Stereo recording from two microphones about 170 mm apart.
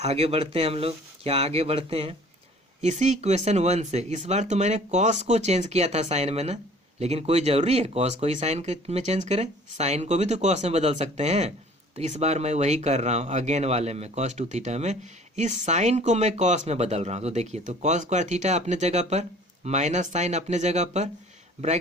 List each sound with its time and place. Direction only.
0.0 s speech: 40° right (ahead or behind)